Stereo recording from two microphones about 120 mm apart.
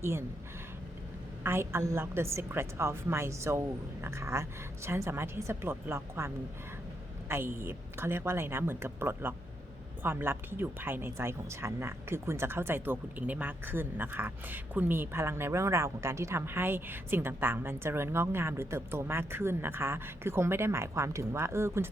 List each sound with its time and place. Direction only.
0.0 s speech: 20° right (ahead or behind)
1.5 s speech: 20° right (ahead or behind)